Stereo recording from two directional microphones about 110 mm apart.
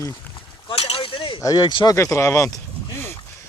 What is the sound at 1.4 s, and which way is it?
Speech, 35° left (ahead or behind).